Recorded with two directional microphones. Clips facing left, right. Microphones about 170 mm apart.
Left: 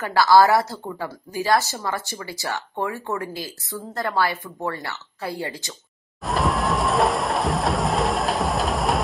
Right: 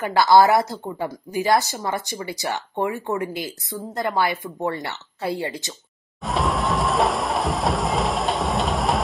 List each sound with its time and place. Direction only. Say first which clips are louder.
0.0 s speech: right 1 dB; 20° right (ahead or behind)
6.2 s music: even; centre (ahead or behind)